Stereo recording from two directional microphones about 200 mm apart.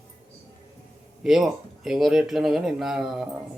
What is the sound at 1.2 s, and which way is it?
Mantra, centre (ahead or behind).